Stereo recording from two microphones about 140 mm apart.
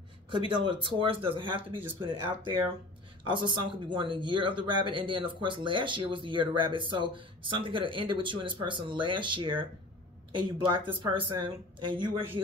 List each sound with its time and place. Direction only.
0.3 s speech: 35° right (ahead or behind)